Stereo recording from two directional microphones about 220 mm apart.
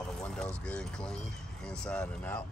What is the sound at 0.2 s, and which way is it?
Speech, 5° left (ahead or behind).